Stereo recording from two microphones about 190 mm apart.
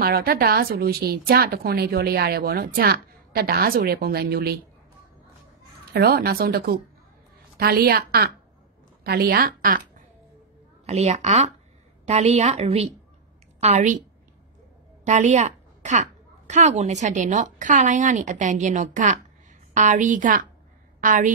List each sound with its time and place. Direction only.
0.0 s a woman's voice: 50° right (ahead or behind)
5.9 s a woman's voice: 55° right (ahead or behind); by 13.9 s 40° right (ahead or behind)
15.0 s a woman's voice: 40° right (ahead or behind)